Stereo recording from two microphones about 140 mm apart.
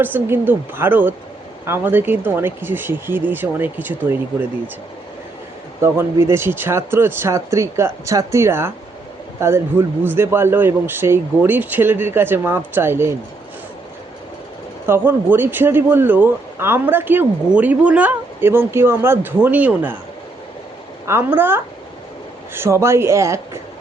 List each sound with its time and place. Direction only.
0.0 s speech: 15° right (ahead or behind)
5.8 s speech: 20° right (ahead or behind)
14.8 s speech: 15° right (ahead or behind)
21.1 s speech: 15° right (ahead or behind)